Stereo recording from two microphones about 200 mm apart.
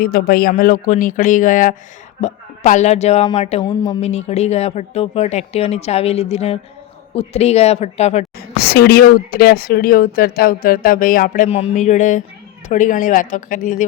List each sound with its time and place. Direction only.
0.0 s speech: 45° left (ahead or behind)
3.6 s speech: 25° left (ahead or behind)
8.4 s speech: 55° left (ahead or behind)